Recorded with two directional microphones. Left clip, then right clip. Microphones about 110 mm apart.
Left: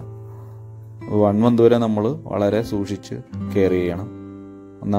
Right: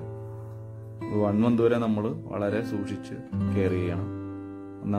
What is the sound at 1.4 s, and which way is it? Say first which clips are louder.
Speech: left 8 dB; 50° left (ahead or behind).